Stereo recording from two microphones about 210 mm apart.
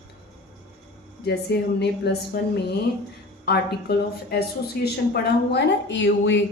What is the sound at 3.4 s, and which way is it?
A woman's voice, 50° left (ahead or behind).